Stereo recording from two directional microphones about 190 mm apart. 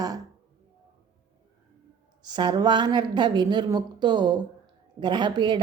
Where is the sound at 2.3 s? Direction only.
25° right (ahead or behind).